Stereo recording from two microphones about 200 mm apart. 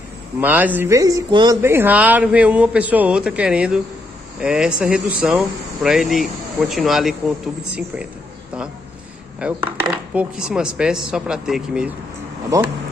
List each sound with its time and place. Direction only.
0.4 s speech: 10° right (ahead or behind)
9.4 s speech: 5° right (ahead or behind)
12.5 s speech: 15° right (ahead or behind)